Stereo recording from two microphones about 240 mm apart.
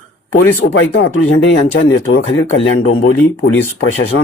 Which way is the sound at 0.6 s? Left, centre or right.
Left.